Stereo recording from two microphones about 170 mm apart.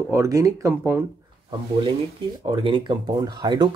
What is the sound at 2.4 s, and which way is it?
Speech, 30° right (ahead or behind).